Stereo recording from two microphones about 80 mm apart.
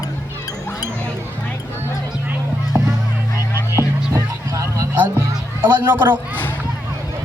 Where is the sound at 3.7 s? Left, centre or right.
Right.